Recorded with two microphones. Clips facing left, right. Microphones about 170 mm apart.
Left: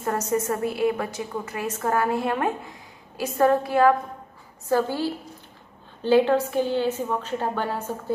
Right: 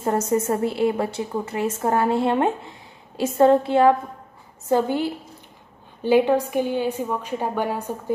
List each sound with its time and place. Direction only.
0.3 s a woman's voice: 25° right (ahead or behind)